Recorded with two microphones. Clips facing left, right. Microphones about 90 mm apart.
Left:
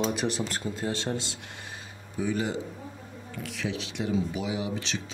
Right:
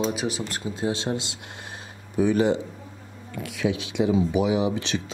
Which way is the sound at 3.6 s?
90° right.